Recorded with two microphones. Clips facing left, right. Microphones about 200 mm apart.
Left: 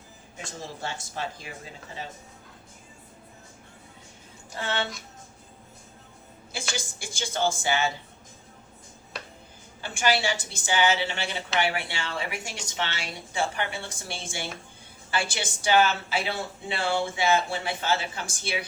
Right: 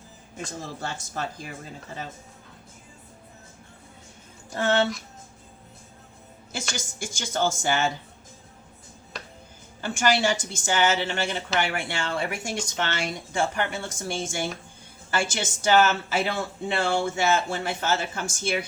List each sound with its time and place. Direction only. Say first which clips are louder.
0.3 s speech: right 3 dB; 45° right (ahead or behind)
4.5 s speech: right 8 dB; 45° right (ahead or behind)
6.5 s speech: right 1 dB; 45° right (ahead or behind)
9.8 s speech: right 3 dB; 45° right (ahead or behind)